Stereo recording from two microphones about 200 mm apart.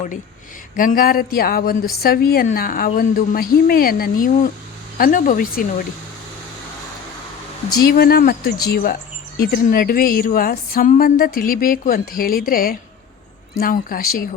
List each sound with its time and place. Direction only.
0.8 s speech: 45° left (ahead or behind)
7.8 s speech: 50° left (ahead or behind)